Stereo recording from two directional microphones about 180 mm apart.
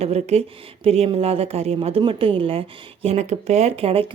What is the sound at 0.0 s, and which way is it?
Speech, 35° right (ahead or behind).